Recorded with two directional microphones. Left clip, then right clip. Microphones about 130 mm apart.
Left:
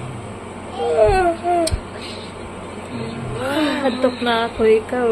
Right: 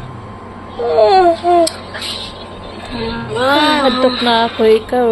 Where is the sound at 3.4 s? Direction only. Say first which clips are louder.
Right 9 dB; 40° right (ahead or behind).